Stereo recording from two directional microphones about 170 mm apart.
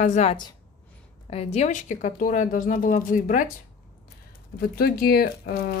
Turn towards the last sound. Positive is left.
turn(degrees=65)  # may be behind; listen again after turning